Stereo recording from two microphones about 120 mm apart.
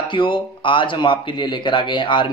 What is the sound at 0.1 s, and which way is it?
Speech, 45° left (ahead or behind).